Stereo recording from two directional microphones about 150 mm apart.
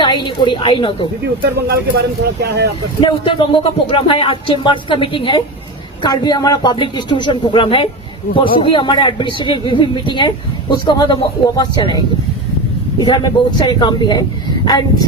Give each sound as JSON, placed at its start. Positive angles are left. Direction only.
{"t": 0.0, "sound": "a woman's voice", "side_deg": 30}
{"t": 1.5, "sound": "speech", "side_deg": -90}
{"t": 3.0, "sound": "speech", "side_deg": 35}